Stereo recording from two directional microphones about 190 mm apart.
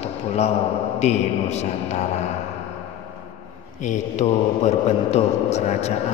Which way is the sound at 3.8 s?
40° left (ahead or behind).